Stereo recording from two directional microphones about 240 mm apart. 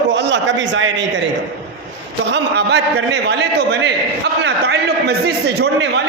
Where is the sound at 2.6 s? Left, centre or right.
Right.